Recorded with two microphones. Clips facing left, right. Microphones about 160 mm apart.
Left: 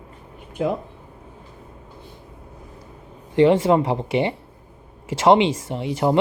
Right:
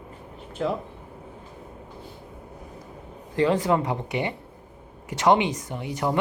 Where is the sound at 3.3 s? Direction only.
25° left (ahead or behind).